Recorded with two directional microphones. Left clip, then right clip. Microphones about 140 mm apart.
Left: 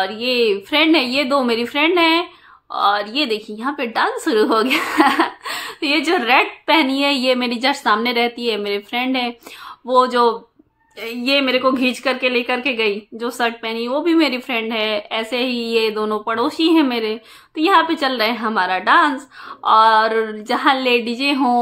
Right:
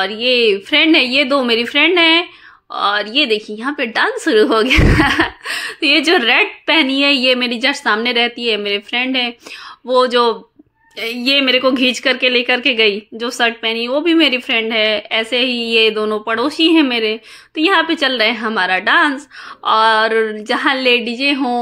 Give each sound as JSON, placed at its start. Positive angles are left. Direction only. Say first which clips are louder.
{"t": 0.0, "sound": "a woman's voice", "louder": "right 4 dB", "side_deg": -20}
{"t": 11.0, "sound": "a woman's voice", "louder": "right 3 dB", "side_deg": -35}